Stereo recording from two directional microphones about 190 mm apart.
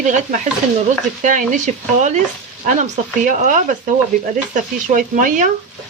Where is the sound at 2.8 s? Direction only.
40° right (ahead or behind).